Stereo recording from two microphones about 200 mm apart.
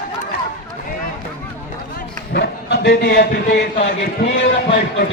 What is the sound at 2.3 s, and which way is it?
Speech, 55° left (ahead or behind).